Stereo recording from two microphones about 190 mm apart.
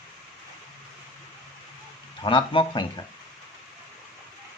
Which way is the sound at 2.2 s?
25° left (ahead or behind).